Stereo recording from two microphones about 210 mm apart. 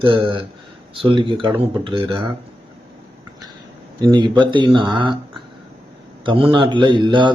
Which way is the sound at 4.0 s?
20° right (ahead or behind).